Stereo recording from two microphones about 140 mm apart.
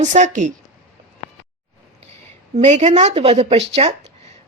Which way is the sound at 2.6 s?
55° right (ahead or behind).